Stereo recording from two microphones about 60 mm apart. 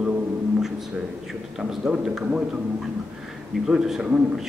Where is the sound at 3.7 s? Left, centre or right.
Centre.